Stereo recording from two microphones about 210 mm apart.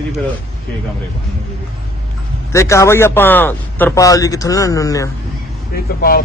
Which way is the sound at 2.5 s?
15° left (ahead or behind).